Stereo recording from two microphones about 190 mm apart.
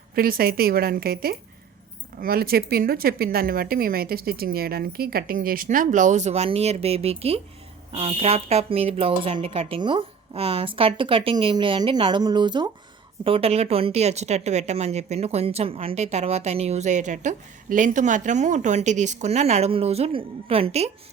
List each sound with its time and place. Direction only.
0.1 s speech: 50° right (ahead or behind); by 20.9 s 30° right (ahead or behind)